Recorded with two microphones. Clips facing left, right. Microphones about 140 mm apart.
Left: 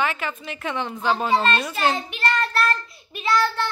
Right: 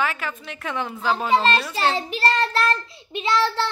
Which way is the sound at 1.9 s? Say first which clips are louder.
Right 2 dB; 35° right (ahead or behind).